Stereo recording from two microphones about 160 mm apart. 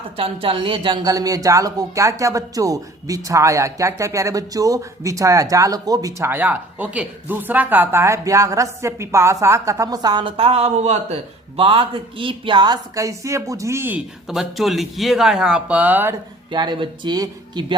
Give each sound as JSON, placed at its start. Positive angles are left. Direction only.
{"t": 0.2, "sound": "speech", "side_deg": -35}
{"t": 16.5, "sound": "speech", "side_deg": -30}